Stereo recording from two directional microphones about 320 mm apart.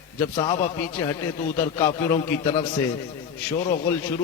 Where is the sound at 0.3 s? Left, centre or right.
Centre.